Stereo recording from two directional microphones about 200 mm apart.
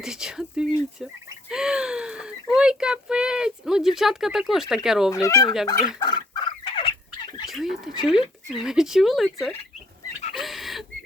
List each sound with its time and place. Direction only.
0.0 s speech: 5° right (ahead or behind)
5.1 s fowl: 15° left (ahead or behind)
7.4 s speech: centre (ahead or behind)
10.3 s a sound: centre (ahead or behind)